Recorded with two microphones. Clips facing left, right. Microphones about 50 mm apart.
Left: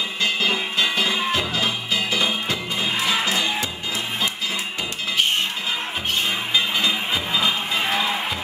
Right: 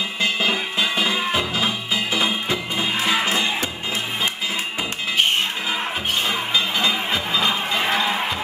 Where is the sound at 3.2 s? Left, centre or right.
Right.